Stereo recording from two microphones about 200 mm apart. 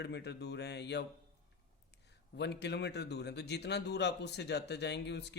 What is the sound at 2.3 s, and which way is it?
A man's voice, 55° left (ahead or behind).